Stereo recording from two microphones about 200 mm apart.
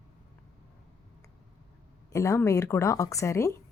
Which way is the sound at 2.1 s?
15° left (ahead or behind).